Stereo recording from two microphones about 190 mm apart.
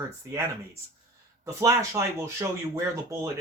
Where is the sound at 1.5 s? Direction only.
15° right (ahead or behind).